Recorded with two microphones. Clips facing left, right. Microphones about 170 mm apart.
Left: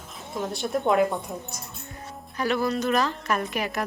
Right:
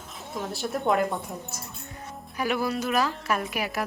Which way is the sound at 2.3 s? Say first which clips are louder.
Left 2 dB; 10° right (ahead or behind).